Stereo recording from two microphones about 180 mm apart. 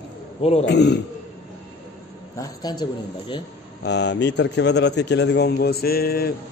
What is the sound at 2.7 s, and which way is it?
Speech, 20° left (ahead or behind).